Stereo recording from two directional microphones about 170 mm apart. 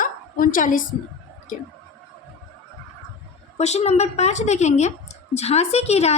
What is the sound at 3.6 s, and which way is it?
Speech, 40° left (ahead or behind).